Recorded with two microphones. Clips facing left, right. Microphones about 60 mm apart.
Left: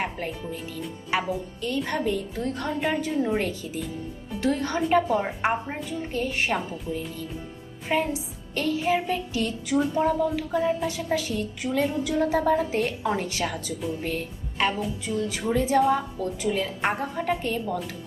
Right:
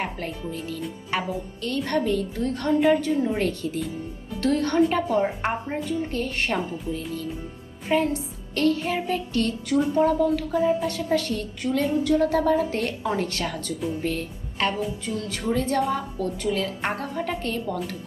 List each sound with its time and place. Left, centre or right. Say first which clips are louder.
0.0 s a woman's voice: even; centre
7.9 s music: right 3 dB; centre
10.7 s a woman's voice: right 3 dB; centre